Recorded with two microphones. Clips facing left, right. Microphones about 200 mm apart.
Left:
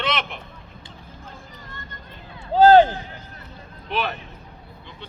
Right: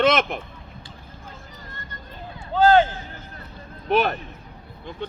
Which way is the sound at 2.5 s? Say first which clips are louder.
Left 4 dB; 35° left (ahead or behind).